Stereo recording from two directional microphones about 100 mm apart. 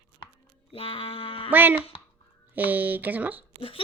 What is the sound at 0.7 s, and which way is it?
Music, 65° left (ahead or behind).